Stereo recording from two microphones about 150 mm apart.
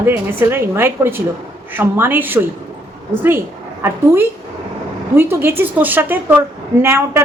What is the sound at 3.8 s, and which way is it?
Speech, 15° right (ahead or behind).